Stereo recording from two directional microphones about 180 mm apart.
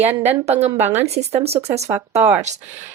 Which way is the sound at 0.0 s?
35° right (ahead or behind).